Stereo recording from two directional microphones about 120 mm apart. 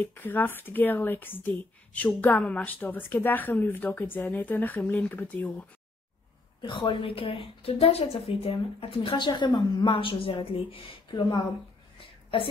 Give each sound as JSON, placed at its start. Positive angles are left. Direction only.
{"t": 0.0, "sound": "a woman's voice", "side_deg": 15}
{"t": 6.6, "sound": "a woman's voice", "side_deg": 40}